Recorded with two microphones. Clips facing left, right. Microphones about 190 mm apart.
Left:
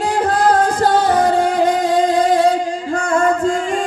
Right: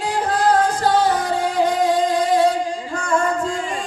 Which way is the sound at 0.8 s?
50° left (ahead or behind).